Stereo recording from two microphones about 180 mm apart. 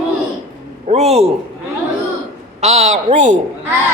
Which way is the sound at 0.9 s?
35° right (ahead or behind).